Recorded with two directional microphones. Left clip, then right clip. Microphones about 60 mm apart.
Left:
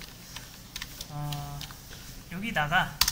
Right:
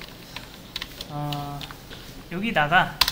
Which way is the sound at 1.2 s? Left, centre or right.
Left.